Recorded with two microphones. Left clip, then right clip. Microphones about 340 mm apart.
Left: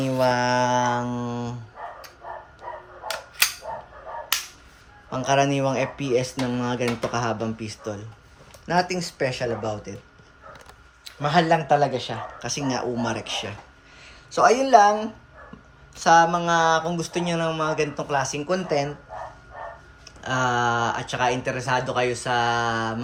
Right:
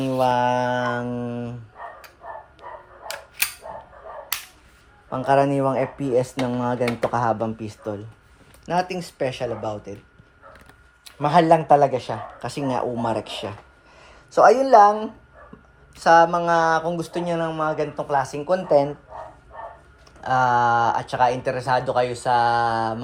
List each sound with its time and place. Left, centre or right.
0.0 s mantra: centre
5.1 s speech: centre
11.2 s speech: centre
14.6 s speech: centre
20.2 s speech: centre